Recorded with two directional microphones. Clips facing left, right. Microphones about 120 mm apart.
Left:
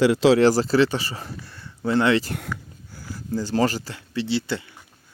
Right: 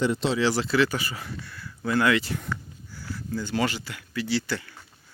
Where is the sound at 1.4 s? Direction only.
30° left (ahead or behind).